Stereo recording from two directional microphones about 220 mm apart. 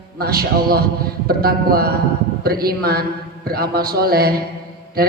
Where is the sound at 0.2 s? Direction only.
45° right (ahead or behind).